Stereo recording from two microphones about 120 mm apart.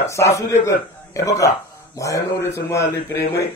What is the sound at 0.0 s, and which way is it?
Speech, 25° left (ahead or behind).